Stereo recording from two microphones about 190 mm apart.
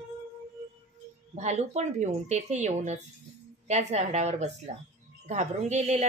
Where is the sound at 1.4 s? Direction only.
35° right (ahead or behind).